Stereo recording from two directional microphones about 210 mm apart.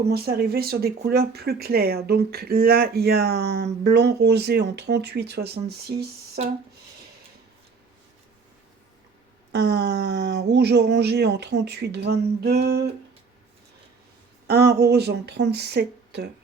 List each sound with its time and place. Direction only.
0.1 s speech: 50° right (ahead or behind)
9.5 s speech: 50° right (ahead or behind)
14.4 s speech: 50° right (ahead or behind)